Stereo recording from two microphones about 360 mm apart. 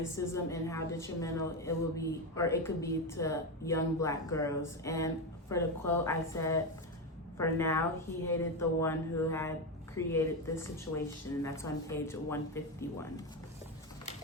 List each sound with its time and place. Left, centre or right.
0.3 s a woman's voice: centre